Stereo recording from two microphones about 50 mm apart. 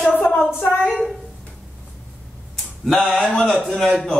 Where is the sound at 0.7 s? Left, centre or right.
Centre.